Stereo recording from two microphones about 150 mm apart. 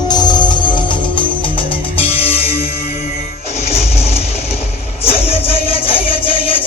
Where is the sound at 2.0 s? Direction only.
40° left (ahead or behind).